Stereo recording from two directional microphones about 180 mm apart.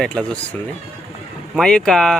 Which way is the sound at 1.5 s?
5° left (ahead or behind).